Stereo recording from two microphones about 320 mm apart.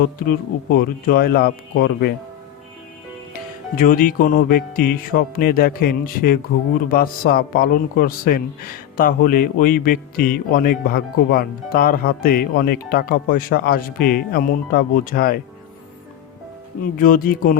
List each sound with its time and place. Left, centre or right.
0.3 s music: left
3.3 s music: left
16.8 s music: left